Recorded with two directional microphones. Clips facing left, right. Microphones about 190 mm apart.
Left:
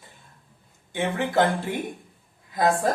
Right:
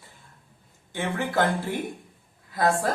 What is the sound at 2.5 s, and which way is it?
Speech, 20° left (ahead or behind).